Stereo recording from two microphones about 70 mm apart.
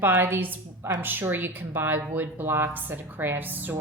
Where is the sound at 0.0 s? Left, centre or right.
Right.